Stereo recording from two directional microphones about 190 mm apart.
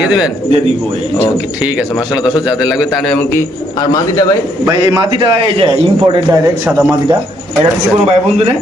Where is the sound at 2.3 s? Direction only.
5° right (ahead or behind).